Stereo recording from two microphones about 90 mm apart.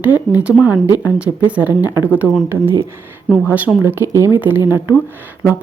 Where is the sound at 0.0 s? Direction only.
20° right (ahead or behind).